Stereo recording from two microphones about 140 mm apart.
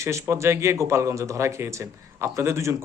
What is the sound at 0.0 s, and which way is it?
Speech, 20° right (ahead or behind).